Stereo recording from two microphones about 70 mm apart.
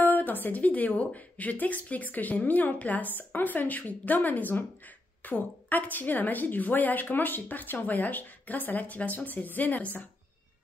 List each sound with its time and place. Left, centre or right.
0.0 s a woman's voice: left